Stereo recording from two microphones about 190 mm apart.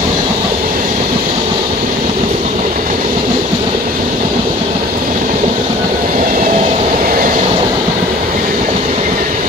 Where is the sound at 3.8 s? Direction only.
45° right (ahead or behind).